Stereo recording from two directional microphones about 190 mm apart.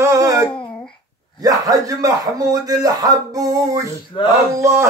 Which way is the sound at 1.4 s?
20° right (ahead or behind).